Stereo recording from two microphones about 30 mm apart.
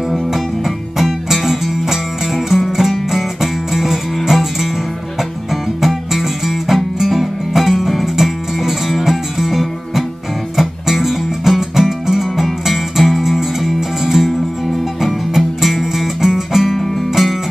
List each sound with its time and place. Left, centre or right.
0.1 s music: centre
15.0 s music: centre